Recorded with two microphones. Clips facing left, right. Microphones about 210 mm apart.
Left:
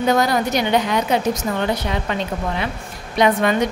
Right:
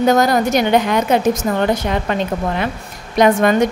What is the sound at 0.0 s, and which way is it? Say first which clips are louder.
A woman's voice: right 4 dB; 45° right (ahead or behind).